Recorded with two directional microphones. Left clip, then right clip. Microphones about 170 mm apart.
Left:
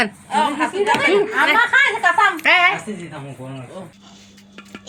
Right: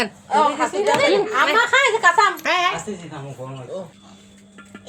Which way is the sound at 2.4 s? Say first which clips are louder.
Left 6 dB; 10° left (ahead or behind).